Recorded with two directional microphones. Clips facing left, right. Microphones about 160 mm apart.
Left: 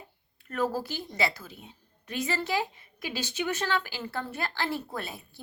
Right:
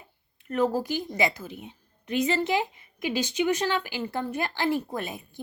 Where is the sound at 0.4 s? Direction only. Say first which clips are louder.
Right 5 dB; 15° right (ahead or behind).